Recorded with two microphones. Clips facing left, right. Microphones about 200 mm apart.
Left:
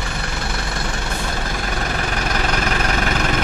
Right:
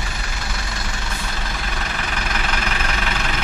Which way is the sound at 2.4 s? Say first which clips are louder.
Left 5 dB; 45° left (ahead or behind).